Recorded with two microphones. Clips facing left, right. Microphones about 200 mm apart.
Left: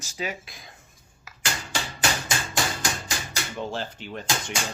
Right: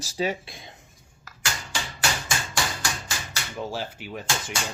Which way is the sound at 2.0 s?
20° left (ahead or behind).